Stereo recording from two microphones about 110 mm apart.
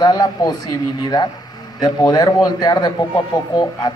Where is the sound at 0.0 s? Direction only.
40° left (ahead or behind).